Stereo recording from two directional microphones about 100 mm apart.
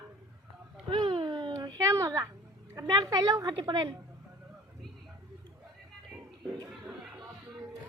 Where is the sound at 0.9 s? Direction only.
55° right (ahead or behind).